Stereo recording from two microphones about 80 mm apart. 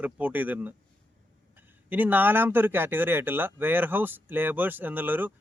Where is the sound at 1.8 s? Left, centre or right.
Right.